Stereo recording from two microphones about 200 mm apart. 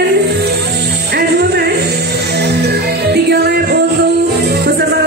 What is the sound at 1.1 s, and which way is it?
Music, 55° right (ahead or behind).